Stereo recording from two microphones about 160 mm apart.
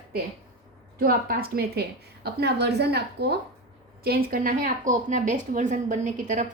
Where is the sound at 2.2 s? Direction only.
90° right.